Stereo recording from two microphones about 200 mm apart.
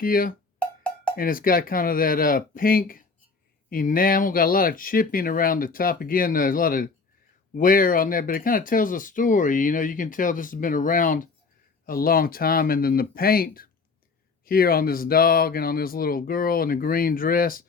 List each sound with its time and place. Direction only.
0.0 s speech: 45° left (ahead or behind)
0.6 s cowbell: 5° left (ahead or behind)
1.1 s speech: 45° left (ahead or behind)